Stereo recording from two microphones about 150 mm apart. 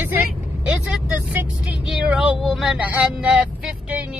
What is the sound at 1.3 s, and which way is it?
Vehicle, 10° right (ahead or behind).